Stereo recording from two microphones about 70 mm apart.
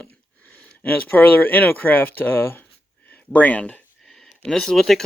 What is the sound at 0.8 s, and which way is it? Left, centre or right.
Speech, left.